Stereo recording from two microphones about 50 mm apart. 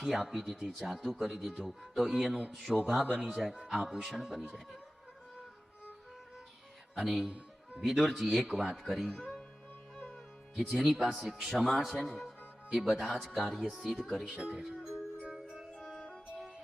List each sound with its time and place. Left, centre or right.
0.0 s speech: centre
6.9 s a man's voice: centre
9.9 s music: centre
10.5 s a man's voice: centre
14.3 s speech: centre
14.8 s music: centre
15.7 s music: centre